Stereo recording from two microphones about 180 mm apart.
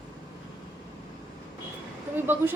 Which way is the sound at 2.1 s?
10° right (ahead or behind).